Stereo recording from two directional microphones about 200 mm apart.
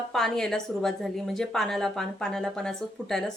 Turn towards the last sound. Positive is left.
turn(degrees=0)  # may be behind; listen again after turning